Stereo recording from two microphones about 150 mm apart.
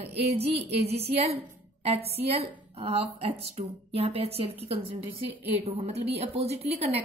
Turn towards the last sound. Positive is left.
turn(degrees=-45)  # may be behind; listen again after turning